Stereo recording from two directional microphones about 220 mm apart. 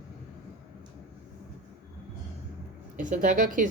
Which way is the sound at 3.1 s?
35° right (ahead or behind).